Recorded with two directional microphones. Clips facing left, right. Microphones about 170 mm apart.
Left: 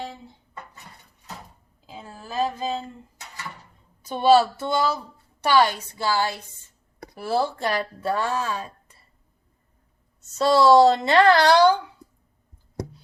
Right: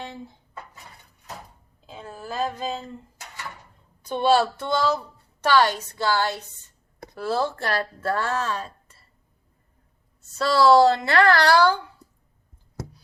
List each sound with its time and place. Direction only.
4.1 s speech: 5° left (ahead or behind)
10.2 s a woman's voice: 20° left (ahead or behind)